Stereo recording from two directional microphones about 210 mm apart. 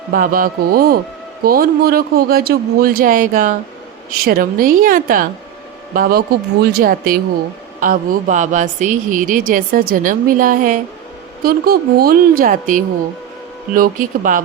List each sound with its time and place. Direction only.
0.1 s a man's voice: 40° right (ahead or behind)